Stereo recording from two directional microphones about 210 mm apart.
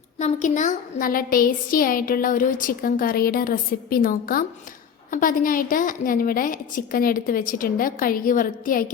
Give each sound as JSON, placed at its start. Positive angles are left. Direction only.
{"t": 0.2, "sound": "a woman's voice", "side_deg": 35}